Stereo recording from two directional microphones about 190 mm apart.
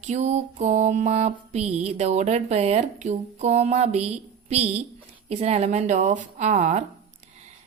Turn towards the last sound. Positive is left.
turn(degrees=-40)  # may be behind; listen again after turning